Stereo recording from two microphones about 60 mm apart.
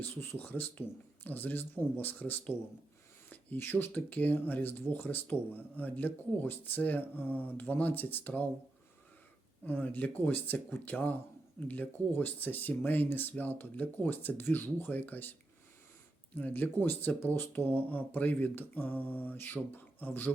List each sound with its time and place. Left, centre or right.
0.0 s speech: left
9.6 s speech: left